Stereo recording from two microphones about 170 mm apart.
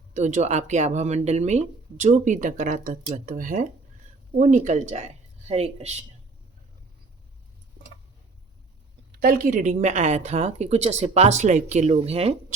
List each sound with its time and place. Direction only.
0.1 s a woman's voice: 45° right (ahead or behind)
9.2 s a woman's voice: 55° right (ahead or behind); by 12.5 s 35° right (ahead or behind)